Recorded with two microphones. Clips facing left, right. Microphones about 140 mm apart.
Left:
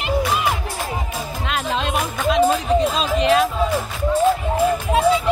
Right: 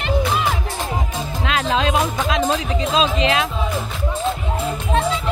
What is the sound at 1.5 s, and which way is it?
Music, 90° right.